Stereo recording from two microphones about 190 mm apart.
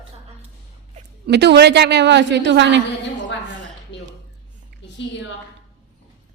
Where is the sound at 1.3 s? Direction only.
60° right (ahead or behind).